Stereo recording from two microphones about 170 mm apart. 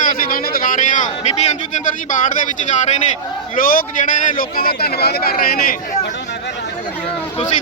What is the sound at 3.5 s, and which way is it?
A man's voice, 55° left (ahead or behind).